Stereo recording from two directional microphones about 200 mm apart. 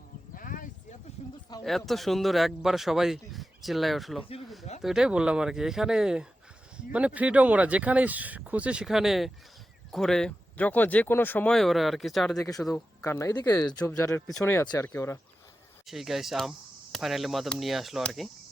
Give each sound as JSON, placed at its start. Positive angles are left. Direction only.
{"t": 0.3, "sound": "a sound", "side_deg": 45}
{"t": 1.6, "sound": "speech", "side_deg": 0}
{"t": 12.4, "sound": "speech", "side_deg": 15}
{"t": 12.6, "sound": "speech", "side_deg": 5}
{"t": 13.1, "sound": "speech", "side_deg": 15}
{"t": 15.9, "sound": "speech", "side_deg": 0}